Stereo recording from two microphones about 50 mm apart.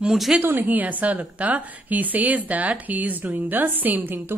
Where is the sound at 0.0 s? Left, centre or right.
Centre.